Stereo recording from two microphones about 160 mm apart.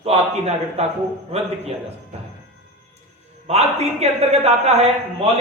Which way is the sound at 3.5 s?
40° right (ahead or behind).